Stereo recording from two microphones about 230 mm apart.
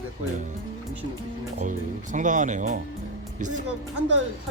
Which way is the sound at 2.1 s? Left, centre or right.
Right.